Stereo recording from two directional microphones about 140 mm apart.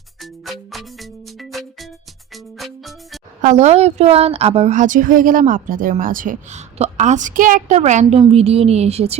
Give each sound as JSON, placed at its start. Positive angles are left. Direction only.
{"t": 0.2, "sound": "music", "side_deg": 0}
{"t": 3.4, "sound": "a woman's voice", "side_deg": -55}
{"t": 8.2, "sound": "a woman's voice", "side_deg": -45}